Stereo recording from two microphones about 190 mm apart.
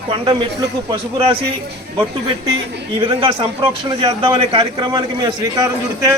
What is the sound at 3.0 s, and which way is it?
A man's voice, 30° right (ahead or behind).